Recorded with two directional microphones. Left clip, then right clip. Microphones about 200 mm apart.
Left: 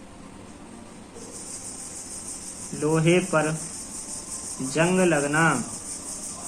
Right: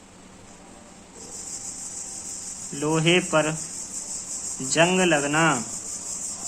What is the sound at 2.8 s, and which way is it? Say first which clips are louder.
Speech: even; 45° right (ahead or behind).